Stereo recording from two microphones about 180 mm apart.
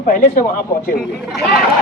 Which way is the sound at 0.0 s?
50° left (ahead or behind).